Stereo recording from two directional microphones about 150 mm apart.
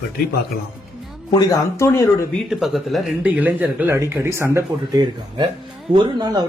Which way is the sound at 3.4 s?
10° right (ahead or behind).